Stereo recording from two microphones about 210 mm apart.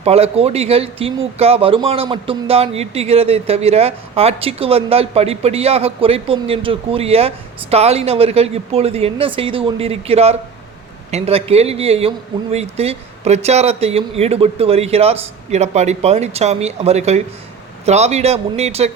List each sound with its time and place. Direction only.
0.0 s speech: 30° right (ahead or behind)